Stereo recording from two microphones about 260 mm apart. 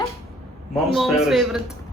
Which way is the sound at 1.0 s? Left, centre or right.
Centre.